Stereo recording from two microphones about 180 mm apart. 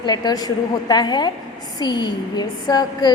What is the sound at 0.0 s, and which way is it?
A woman's voice, 25° left (ahead or behind).